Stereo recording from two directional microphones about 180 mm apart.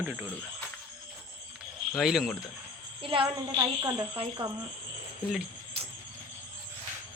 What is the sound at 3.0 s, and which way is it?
A woman's voice, 30° right (ahead or behind).